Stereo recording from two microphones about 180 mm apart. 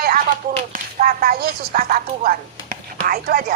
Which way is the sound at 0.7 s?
50° right (ahead or behind).